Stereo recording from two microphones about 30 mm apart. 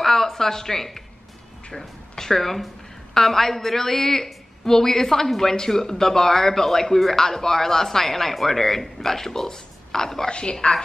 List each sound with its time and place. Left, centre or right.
0.0 s speech: centre
10.6 s a woman's voice: left